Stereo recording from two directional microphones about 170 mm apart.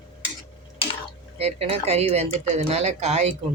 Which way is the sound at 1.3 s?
35° right (ahead or behind).